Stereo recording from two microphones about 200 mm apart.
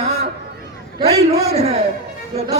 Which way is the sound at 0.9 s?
30° right (ahead or behind).